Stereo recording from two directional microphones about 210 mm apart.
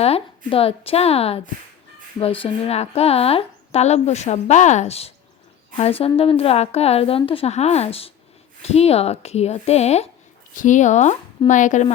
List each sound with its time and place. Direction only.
0.0 s a woman's voice: 30° left (ahead or behind)